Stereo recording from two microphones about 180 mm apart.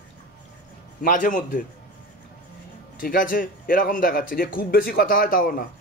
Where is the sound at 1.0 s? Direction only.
50° left (ahead or behind).